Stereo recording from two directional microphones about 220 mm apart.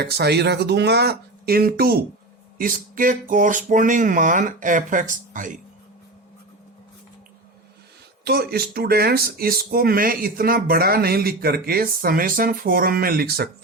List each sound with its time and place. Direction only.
0.0 s speech: 50° right (ahead or behind)
8.2 s speech: 45° right (ahead or behind)